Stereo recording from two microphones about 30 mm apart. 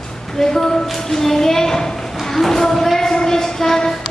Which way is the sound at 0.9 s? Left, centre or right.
Centre.